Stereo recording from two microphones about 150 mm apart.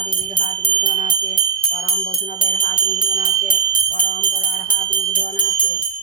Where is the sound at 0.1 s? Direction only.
70° left (ahead or behind).